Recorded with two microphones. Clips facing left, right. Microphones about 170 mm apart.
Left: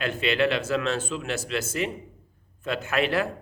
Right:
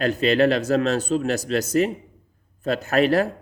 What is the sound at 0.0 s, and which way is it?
A man's voice, 40° right (ahead or behind).